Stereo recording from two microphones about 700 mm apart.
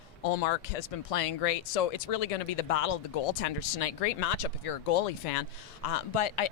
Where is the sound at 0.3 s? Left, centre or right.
Left.